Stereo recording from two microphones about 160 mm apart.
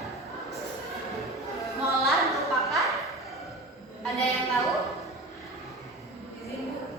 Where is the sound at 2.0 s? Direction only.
Centre (ahead or behind).